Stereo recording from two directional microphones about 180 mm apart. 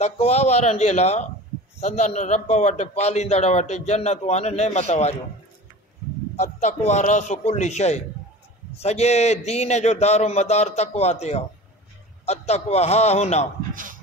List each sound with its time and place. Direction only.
0.0 s a man's voice: 35° left (ahead or behind)
6.3 s a man's voice: 40° left (ahead or behind)